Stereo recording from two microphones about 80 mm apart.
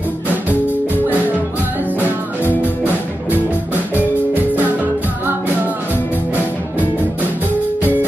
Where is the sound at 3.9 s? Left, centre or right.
Right.